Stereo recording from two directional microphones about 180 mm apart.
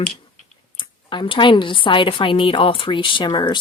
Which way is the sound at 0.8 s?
25° left (ahead or behind).